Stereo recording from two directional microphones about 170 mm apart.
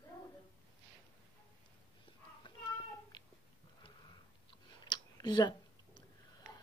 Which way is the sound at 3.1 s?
25° left (ahead or behind).